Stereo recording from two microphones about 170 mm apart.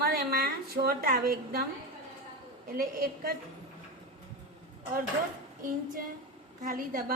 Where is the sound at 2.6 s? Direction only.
60° right (ahead or behind).